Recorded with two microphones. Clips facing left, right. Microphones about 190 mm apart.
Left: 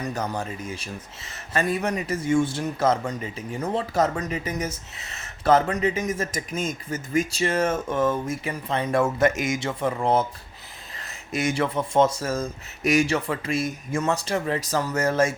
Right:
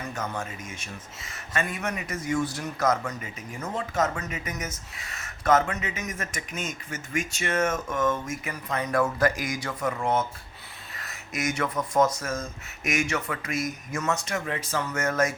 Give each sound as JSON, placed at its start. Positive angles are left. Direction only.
{"t": 0.0, "sound": "speech", "side_deg": 35}